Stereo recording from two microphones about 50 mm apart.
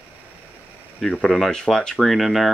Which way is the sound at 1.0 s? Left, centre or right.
Centre.